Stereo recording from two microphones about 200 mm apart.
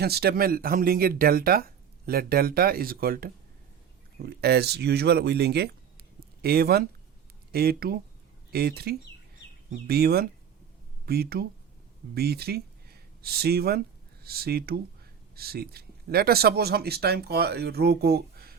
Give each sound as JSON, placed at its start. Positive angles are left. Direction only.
{"t": 0.0, "sound": "speech", "side_deg": -50}